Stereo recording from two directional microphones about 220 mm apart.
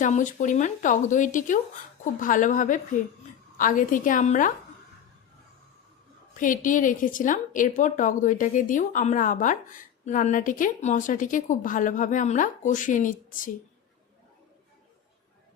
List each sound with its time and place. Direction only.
0.0 s a woman's voice: 35° left (ahead or behind)
6.3 s a woman's voice: 35° left (ahead or behind)